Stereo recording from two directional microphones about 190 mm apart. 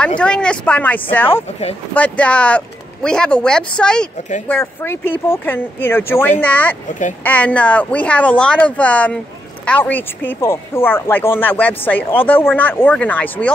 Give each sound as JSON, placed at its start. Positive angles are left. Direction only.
{"t": 0.2, "sound": "speech", "side_deg": 5}
{"t": 1.3, "sound": "speech", "side_deg": 35}
{"t": 2.0, "sound": "speech", "side_deg": 5}
{"t": 6.9, "sound": "speech", "side_deg": 40}
{"t": 7.2, "sound": "speech", "side_deg": 5}